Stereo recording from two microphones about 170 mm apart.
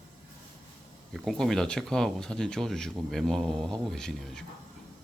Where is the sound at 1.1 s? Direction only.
Centre (ahead or behind).